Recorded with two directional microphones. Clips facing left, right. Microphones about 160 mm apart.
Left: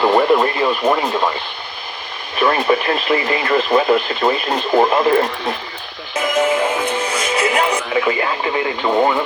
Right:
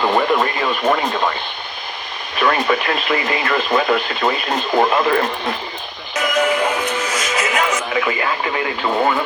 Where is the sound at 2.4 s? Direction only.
30° left (ahead or behind).